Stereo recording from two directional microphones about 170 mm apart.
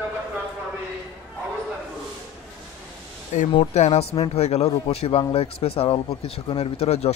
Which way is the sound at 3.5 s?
40° left (ahead or behind).